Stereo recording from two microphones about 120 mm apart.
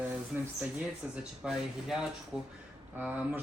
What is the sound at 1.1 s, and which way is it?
Speech, 5° right (ahead or behind).